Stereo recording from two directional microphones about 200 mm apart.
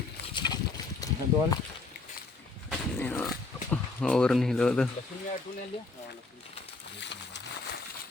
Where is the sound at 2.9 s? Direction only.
10° left (ahead or behind).